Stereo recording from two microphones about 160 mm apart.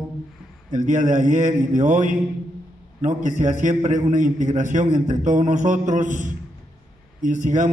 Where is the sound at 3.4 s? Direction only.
50° right (ahead or behind).